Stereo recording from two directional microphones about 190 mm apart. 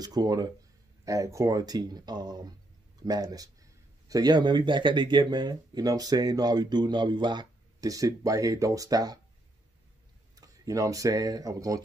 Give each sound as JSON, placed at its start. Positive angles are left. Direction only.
{"t": 0.0, "sound": "speech", "side_deg": -20}
{"t": 10.3, "sound": "speech", "side_deg": -20}